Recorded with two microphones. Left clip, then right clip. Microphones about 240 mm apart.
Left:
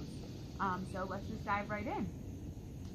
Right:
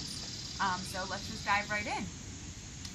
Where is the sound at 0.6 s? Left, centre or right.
Right.